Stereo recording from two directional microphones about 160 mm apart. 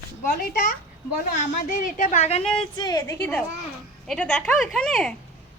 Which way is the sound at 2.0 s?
50° left (ahead or behind).